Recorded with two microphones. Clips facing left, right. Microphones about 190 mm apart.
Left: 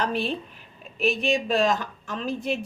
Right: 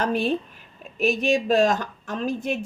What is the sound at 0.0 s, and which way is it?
Speech, 45° right (ahead or behind).